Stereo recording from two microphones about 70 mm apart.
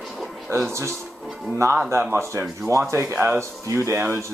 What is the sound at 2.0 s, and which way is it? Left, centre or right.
Speech, right.